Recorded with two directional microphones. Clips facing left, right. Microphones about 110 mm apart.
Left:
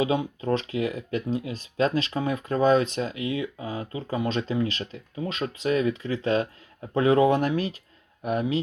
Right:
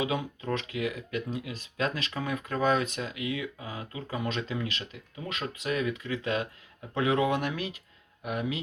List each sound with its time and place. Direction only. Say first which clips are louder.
0.0 s speech: left 6 dB; 30° left (ahead or behind)